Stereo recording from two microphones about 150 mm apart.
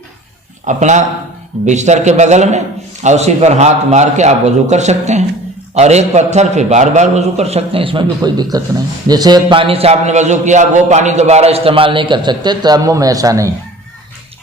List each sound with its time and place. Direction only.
0.6 s a man's voice: 55° right (ahead or behind); by 13.5 s 20° right (ahead or behind)